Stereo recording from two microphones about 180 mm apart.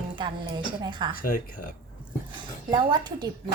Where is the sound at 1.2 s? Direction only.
50° left (ahead or behind).